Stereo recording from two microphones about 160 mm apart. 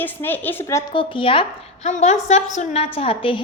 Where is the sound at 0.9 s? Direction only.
30° left (ahead or behind).